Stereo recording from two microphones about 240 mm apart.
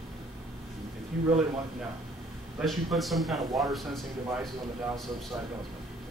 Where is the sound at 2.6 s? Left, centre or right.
Centre.